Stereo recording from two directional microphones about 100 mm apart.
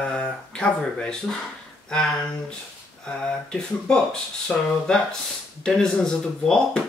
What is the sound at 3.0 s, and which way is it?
Speech, 10° left (ahead or behind).